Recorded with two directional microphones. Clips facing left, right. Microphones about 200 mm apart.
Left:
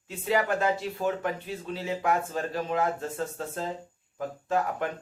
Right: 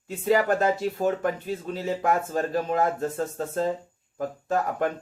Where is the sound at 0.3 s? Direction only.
40° right (ahead or behind).